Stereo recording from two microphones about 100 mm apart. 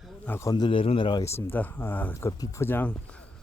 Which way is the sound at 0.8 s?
60° left (ahead or behind).